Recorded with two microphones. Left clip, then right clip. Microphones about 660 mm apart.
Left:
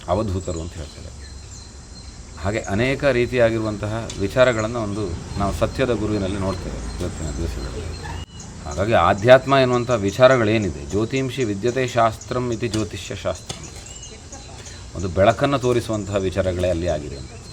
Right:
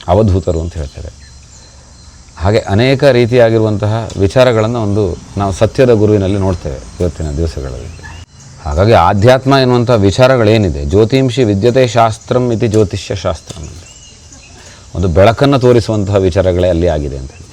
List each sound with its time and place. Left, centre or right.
0.0 s speech: right
2.4 s speech: right
8.6 s a man's voice: right
15.1 s speech: right